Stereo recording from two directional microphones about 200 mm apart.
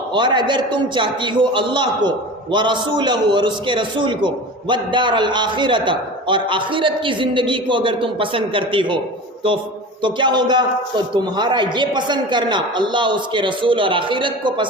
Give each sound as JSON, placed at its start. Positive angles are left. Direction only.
{"t": 0.1, "sound": "a man's voice", "side_deg": -25}
{"t": 10.0, "sound": "a man's voice", "side_deg": -25}